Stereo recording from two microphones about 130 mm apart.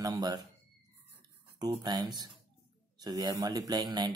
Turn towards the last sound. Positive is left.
turn(degrees=-35)  # may be behind; listen again after turning